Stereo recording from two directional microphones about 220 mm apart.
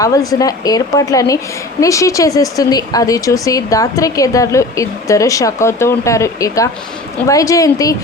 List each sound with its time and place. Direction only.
0.0 s a woman's voice: 15° left (ahead or behind)